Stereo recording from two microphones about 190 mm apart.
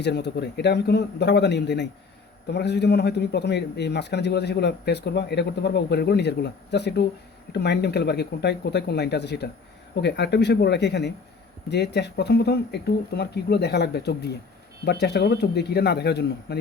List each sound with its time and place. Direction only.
0.0 s a man's voice: 60° left (ahead or behind)